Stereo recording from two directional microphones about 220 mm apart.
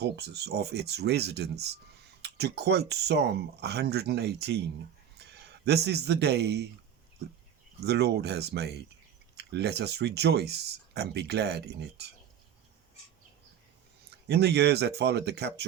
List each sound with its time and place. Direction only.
0.0 s speech: 50° right (ahead or behind)
7.8 s speech: 50° right (ahead or behind)
14.3 s speech: 50° right (ahead or behind)